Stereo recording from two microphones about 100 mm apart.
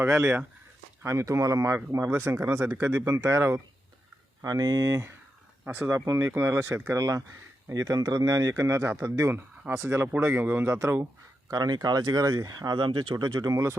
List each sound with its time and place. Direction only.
1.0 s speech: 30° right (ahead or behind)
4.4 s speech: 35° right (ahead or behind); by 6.0 s 20° right (ahead or behind)
6.1 s speech: 35° right (ahead or behind)